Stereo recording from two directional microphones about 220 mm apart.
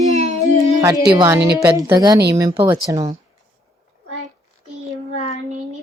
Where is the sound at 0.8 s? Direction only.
15° right (ahead or behind).